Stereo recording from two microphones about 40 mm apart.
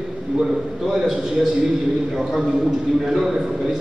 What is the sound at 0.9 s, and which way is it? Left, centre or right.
A man's voice, centre.